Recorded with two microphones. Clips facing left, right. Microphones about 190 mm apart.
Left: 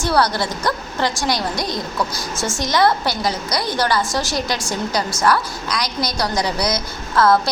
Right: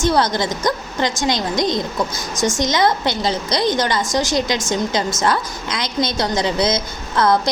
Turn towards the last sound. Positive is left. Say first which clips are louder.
# left 1 dB
turn(degrees=-20)  # may be behind; listen again after turning